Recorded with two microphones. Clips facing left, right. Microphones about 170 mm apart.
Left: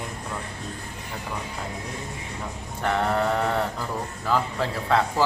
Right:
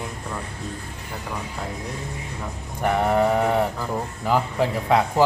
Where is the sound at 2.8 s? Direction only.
15° right (ahead or behind).